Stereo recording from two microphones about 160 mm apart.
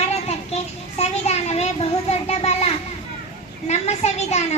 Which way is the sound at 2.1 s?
40° left (ahead or behind).